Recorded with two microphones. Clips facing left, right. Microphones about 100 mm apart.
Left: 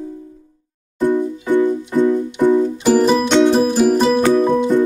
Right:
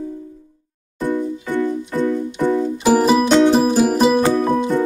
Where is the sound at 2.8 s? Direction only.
5° right (ahead or behind).